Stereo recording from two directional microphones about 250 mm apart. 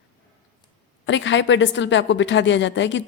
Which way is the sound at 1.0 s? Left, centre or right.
Left.